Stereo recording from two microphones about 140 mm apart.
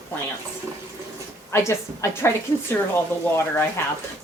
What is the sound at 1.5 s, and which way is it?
Speech, 15° left (ahead or behind).